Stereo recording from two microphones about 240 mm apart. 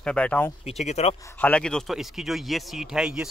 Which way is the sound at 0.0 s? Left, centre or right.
Centre.